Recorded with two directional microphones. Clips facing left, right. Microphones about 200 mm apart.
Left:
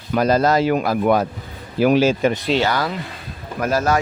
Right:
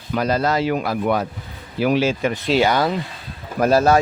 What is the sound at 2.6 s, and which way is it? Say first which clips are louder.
Speech: right 6 dB; 20° right (ahead or behind).